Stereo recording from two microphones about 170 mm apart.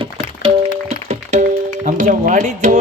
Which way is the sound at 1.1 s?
40° right (ahead or behind).